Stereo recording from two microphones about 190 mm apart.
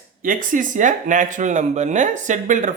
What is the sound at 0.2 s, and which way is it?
Speech, 45° right (ahead or behind).